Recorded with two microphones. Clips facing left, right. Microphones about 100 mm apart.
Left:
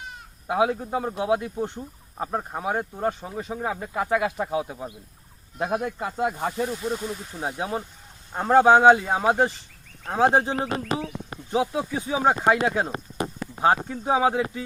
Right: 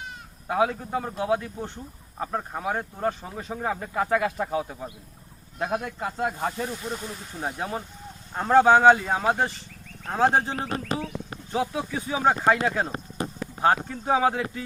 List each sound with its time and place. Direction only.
0.4 s speech: 15° left (ahead or behind)